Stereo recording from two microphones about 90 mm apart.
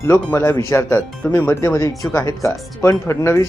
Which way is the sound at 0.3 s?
30° left (ahead or behind).